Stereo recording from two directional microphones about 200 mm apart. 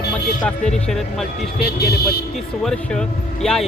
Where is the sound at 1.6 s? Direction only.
50° left (ahead or behind).